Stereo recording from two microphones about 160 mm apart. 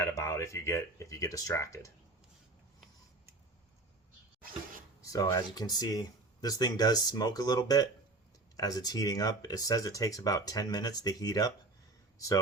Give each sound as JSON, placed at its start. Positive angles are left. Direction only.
{"t": 0.0, "sound": "speech", "side_deg": 20}
{"t": 5.0, "sound": "speech", "side_deg": 20}